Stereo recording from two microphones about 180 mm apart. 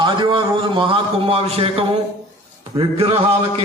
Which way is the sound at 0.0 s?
25° right (ahead or behind).